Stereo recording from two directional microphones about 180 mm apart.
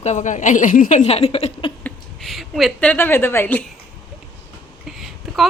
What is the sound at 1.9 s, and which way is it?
A woman's voice, centre (ahead or behind).